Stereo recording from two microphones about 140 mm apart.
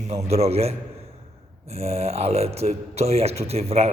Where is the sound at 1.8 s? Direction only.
50° right (ahead or behind).